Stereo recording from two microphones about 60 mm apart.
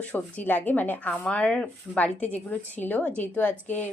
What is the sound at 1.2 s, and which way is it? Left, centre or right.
A woman's voice, centre.